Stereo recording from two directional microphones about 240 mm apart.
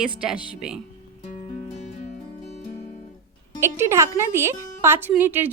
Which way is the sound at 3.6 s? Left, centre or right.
Centre.